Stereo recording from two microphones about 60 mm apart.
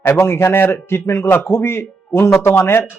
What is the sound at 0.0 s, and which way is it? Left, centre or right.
A man's voice, left.